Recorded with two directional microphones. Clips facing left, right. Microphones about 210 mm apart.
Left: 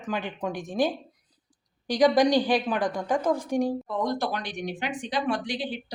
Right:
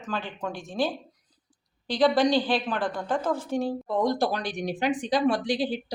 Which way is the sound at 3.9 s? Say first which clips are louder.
Right 3 dB; 35° right (ahead or behind).